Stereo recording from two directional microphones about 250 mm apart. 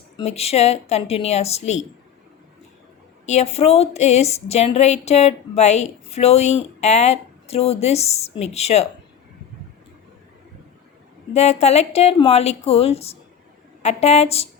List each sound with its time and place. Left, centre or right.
0.2 s a woman's voice: left
3.2 s a woman's voice: left
11.3 s a woman's voice: left